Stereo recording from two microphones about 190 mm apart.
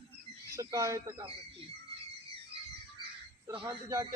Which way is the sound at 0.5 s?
15° right (ahead or behind).